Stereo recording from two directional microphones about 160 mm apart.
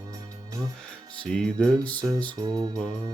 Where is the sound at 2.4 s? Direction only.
25° right (ahead or behind).